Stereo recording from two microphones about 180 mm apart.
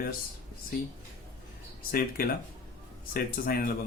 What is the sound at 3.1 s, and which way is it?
Speech, 55° left (ahead or behind).